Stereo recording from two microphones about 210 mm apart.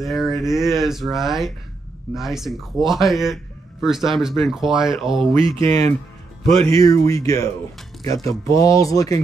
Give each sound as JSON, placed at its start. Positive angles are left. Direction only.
{"t": 0.0, "sound": "speech", "side_deg": 0}
{"t": 5.4, "sound": "speech", "side_deg": -25}
{"t": 5.7, "sound": "speech", "side_deg": 15}